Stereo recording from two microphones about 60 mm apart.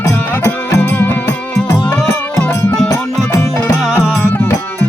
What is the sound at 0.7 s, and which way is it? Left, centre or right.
Music, left.